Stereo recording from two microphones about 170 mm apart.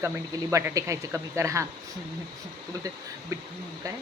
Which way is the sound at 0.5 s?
20° right (ahead or behind).